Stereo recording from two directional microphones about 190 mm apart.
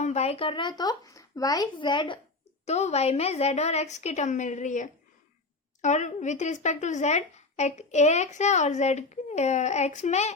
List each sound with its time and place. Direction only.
0.0 s a child's voice: 35° left (ahead or behind)
2.6 s speech: 35° left (ahead or behind)